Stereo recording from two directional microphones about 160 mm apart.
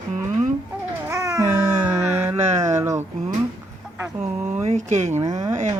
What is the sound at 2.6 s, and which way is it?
Speech, 15° right (ahead or behind).